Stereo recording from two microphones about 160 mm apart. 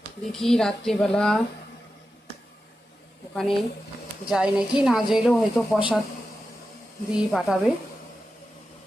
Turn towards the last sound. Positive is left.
turn(degrees=-5)  # may be behind; listen again after turning